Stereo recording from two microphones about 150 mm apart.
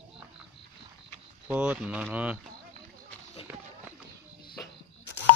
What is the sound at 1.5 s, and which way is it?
Speech, 10° right (ahead or behind).